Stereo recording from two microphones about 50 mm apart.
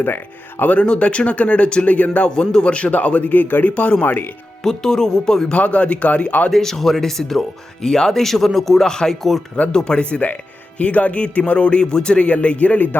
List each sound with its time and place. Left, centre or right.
0.6 s a man's voice: left
2.3 s a man's voice: centre
4.0 s speech: left
4.6 s speech: centre
5.5 s a man's voice: left
6.5 s speech: centre
9.7 s a man's voice: centre